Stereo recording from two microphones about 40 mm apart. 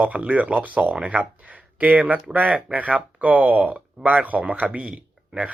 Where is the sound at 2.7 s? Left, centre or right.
Right.